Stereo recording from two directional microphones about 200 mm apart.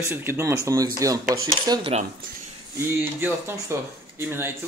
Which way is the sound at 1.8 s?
30° right (ahead or behind).